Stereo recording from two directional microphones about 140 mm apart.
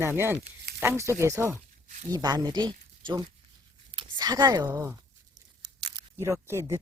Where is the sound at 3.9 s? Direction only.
35° right (ahead or behind).